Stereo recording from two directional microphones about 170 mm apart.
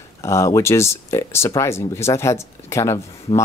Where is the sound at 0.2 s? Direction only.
15° left (ahead or behind).